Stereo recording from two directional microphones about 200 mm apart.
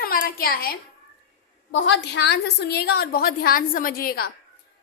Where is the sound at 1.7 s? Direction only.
65° left (ahead or behind); by 4.3 s 50° left (ahead or behind).